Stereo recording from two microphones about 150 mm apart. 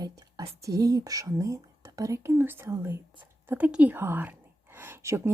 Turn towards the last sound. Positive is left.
turn(degrees=-15)  # may be behind; listen again after turning